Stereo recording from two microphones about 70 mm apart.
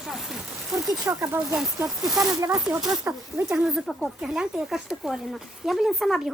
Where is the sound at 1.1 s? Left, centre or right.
Right.